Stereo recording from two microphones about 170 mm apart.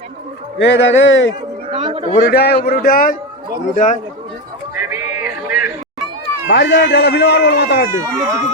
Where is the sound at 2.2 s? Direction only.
65° left (ahead or behind).